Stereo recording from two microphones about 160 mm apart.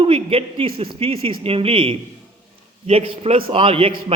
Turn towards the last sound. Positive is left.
turn(degrees=-35)  # may be behind; listen again after turning